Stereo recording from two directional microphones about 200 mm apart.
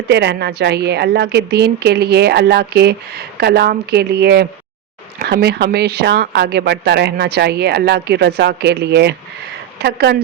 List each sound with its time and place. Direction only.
0.1 s a woman's voice: 55° right (ahead or behind)